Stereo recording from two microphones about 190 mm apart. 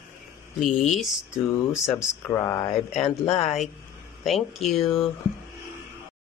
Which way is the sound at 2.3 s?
15° left (ahead or behind).